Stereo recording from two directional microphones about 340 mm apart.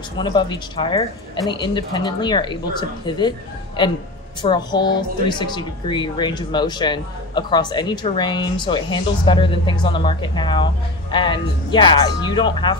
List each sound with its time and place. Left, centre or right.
0.2 s speech: centre